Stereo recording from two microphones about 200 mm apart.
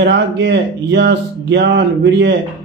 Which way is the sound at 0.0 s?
60° right (ahead or behind).